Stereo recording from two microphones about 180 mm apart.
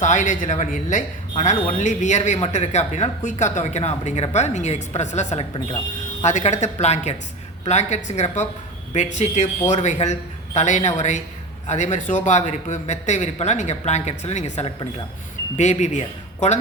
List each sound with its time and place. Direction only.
0.0 s speech: 45° left (ahead or behind)